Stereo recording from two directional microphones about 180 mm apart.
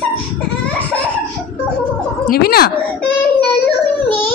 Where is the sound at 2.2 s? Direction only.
60° left (ahead or behind).